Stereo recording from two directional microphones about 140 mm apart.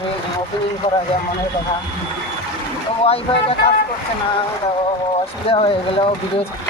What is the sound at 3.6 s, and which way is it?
Speech, 45° left (ahead or behind).